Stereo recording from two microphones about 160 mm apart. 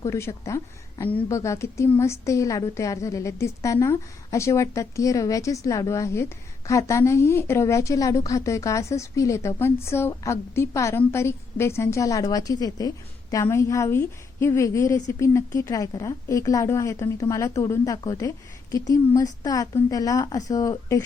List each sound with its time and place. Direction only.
0.0 s a woman's voice: 15° left (ahead or behind)